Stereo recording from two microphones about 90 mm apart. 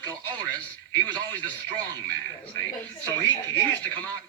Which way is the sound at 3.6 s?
15° left (ahead or behind).